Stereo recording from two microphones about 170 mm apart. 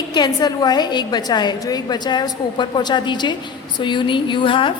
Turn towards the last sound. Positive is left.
turn(degrees=30)  # may be behind; listen again after turning